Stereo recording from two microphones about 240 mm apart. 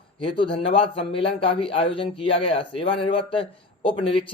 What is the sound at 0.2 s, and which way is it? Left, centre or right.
Speech, left.